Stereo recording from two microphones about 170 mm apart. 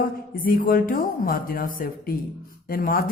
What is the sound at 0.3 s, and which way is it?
A woman's voice, 55° left (ahead or behind).